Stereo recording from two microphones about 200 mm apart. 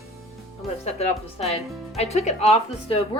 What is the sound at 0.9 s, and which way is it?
Speech, 30° left (ahead or behind).